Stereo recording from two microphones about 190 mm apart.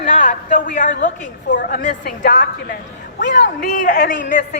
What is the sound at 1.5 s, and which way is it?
Speech, 65° left (ahead or behind).